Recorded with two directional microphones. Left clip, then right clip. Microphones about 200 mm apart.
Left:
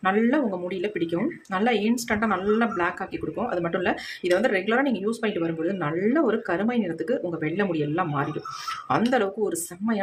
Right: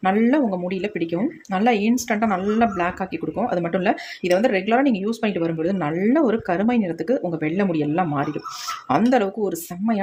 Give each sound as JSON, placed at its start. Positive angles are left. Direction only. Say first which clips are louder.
{"t": 0.0, "sound": "speech", "louder": "right 3 dB", "side_deg": -25}